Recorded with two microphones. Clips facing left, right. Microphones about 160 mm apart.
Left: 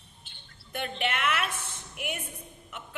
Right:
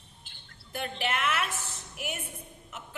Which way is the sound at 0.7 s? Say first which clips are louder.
Left 1 dB; 30° right (ahead or behind).